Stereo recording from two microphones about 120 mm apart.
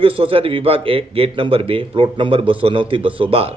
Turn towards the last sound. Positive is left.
turn(degrees=-50)  # may be behind; listen again after turning